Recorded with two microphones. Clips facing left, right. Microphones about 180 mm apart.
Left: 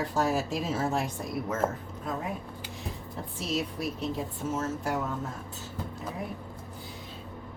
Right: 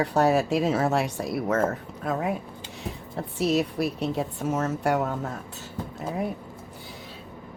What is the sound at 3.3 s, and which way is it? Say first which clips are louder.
Speech: right 8 dB; 70° right (ahead or behind).